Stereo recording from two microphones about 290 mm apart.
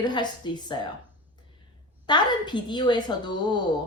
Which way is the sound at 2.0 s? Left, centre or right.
Centre.